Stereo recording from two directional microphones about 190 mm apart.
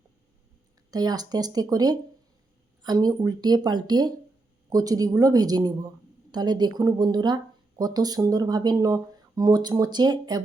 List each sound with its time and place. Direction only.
0.9 s speech: 20° right (ahead or behind)